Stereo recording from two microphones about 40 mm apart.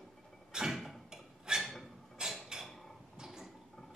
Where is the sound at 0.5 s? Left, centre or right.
Centre.